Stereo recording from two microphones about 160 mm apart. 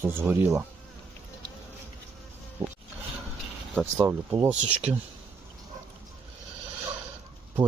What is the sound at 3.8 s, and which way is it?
Speech, 5° right (ahead or behind).